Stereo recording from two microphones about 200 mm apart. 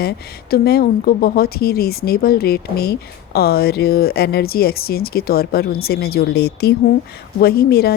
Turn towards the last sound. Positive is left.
turn(degrees=50)  # may be behind; listen again after turning